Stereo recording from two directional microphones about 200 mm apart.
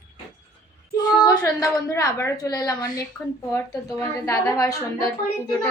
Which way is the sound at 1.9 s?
15° left (ahead or behind).